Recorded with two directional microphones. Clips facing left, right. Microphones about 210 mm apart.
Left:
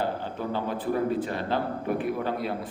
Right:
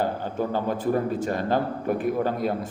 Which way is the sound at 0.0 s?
45° right (ahead or behind).